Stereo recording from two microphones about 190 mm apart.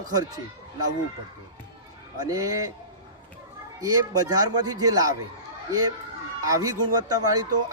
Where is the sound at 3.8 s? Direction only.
20° right (ahead or behind).